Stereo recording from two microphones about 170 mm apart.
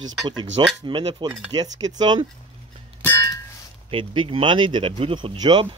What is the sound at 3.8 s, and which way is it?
Speech, 30° right (ahead or behind).